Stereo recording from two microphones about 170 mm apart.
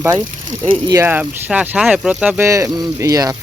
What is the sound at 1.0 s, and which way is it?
Speech, 10° right (ahead or behind).